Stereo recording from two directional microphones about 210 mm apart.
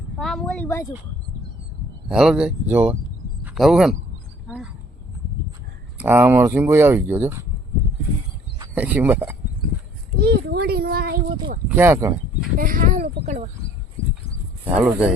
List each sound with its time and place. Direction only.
0.2 s speech: centre (ahead or behind)
2.0 s speech: 5° right (ahead or behind)
4.4 s a sound: 5° right (ahead or behind)
6.0 s speech: 10° right (ahead or behind)
8.7 s speech: 5° right (ahead or behind)
10.2 s speech: 50° right (ahead or behind)
11.7 s speech: 10° right (ahead or behind)
12.5 s speech: 40° right (ahead or behind)
14.6 s speech: 10° right (ahead or behind)